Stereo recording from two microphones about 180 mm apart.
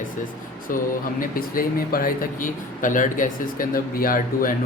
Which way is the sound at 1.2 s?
55° left (ahead or behind).